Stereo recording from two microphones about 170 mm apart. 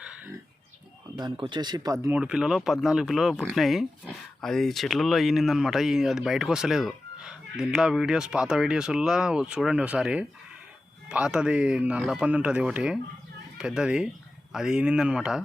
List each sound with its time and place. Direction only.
1.2 s speech: 25° right (ahead or behind)
2.1 s speech: 5° right (ahead or behind)